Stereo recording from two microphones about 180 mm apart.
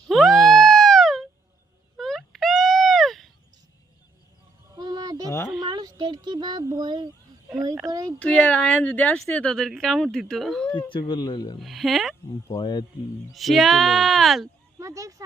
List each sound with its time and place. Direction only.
0.1 s a sound: centre (ahead or behind)
4.7 s honk: 20° right (ahead or behind)
5.5 s a sound: 25° right (ahead or behind)
7.9 s speech: 20° right (ahead or behind)
8.2 s speech: 5° left (ahead or behind)
10.7 s speech: 25° left (ahead or behind)
11.6 s speech: centre (ahead or behind)
12.5 s speech: 25° left (ahead or behind)
13.3 s speech: centre (ahead or behind)
14.8 s a sound: 15° right (ahead or behind)